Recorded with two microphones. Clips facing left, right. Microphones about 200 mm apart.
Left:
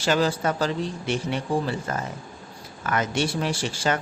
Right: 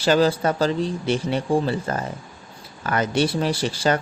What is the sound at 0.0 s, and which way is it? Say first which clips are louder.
Speech: right 4 dB; 35° right (ahead or behind).